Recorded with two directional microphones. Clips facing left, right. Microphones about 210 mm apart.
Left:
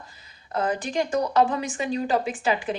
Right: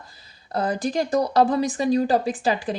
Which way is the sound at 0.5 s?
35° right (ahead or behind).